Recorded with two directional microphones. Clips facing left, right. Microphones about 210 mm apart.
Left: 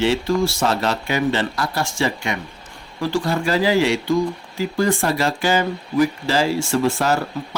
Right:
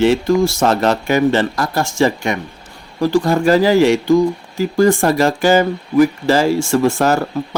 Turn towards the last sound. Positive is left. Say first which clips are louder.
# right 5 dB
turn(degrees=-45)  # may be behind; listen again after turning